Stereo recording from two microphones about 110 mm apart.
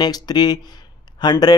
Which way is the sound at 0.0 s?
40° left (ahead or behind).